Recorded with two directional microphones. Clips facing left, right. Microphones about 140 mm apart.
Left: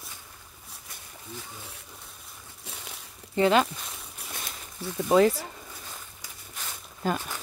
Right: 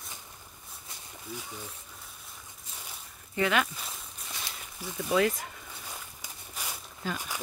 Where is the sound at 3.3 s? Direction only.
30° left (ahead or behind).